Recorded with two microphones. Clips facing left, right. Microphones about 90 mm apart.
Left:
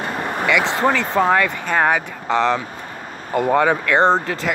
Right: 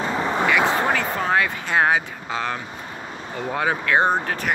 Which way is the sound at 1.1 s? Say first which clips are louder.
Left 5 dB; 65° left (ahead or behind).